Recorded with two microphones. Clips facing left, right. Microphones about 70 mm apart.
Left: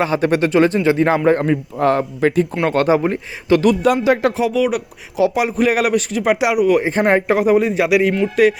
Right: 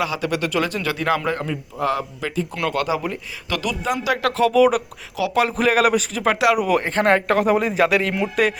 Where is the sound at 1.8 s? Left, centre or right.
Left.